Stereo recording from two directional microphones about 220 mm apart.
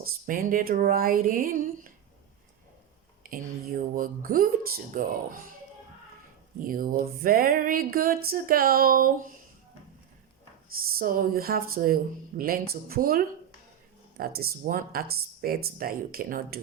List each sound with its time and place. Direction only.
0.0 s music: 40° right (ahead or behind)
3.2 s a sound: 40° right (ahead or behind)
3.9 s music: 40° right (ahead or behind)
6.6 s music: 40° right (ahead or behind)
10.9 s music: 40° right (ahead or behind)